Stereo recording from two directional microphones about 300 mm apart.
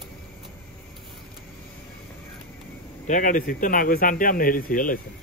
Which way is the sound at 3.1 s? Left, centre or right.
Left.